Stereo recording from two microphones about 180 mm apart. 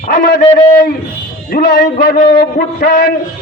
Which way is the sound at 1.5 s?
55° left (ahead or behind).